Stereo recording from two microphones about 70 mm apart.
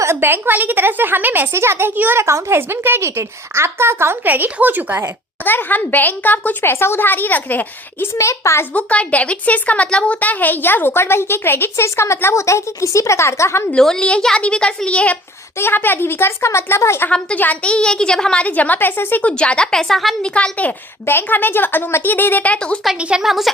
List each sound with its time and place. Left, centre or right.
0.0 s a woman's voice: right
2.2 s speech: right
4.3 s a woman's voice: right
5.5 s speech: left
8.2 s a child's voice: left
8.7 s a woman's voice: centre; by 13.7 s left
13.7 s a woman's voice: centre
15.5 s a woman's voice: left
17.1 s a woman's voice: centre
19.4 s a woman's voice: centre
19.9 s a woman's voice: centre
20.2 s speech: centre
23.0 s a woman's voice: centre
23.2 s a woman's voice: centre